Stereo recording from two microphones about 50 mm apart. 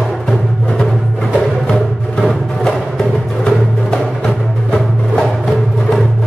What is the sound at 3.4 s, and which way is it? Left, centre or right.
Music, centre.